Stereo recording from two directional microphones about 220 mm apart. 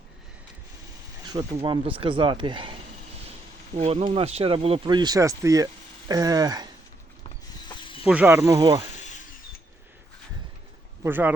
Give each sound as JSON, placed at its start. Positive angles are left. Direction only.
{"t": 1.2, "sound": "speech", "side_deg": -20}
{"t": 3.8, "sound": "speech", "side_deg": -30}
{"t": 7.7, "sound": "snake", "side_deg": 25}
{"t": 8.0, "sound": "speech", "side_deg": -5}
{"t": 9.0, "sound": "ratchet", "side_deg": 35}
{"t": 11.0, "sound": "speech", "side_deg": -10}